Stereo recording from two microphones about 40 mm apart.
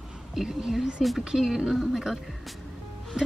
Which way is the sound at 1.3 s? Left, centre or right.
Centre.